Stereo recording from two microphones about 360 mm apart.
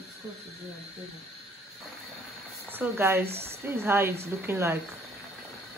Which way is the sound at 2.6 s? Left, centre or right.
Centre.